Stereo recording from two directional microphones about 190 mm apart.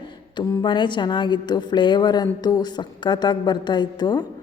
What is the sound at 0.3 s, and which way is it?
A woman's voice, 25° left (ahead or behind).